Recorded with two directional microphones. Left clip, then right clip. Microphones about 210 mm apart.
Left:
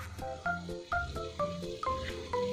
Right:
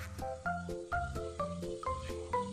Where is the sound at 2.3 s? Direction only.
15° left (ahead or behind).